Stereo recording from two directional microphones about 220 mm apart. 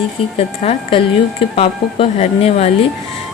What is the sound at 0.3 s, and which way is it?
Speech, 25° left (ahead or behind).